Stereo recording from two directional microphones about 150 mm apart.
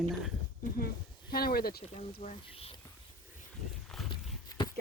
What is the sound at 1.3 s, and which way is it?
Speech, 90° left.